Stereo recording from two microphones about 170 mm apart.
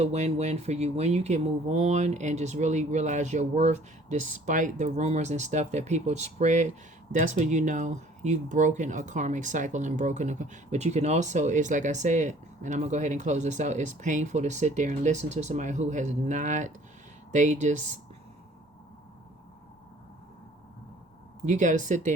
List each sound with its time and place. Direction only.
0.0 s speech: 40° right (ahead or behind)
21.4 s speech: 45° right (ahead or behind)